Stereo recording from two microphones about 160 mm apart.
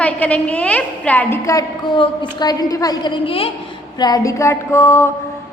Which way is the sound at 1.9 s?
30° left (ahead or behind).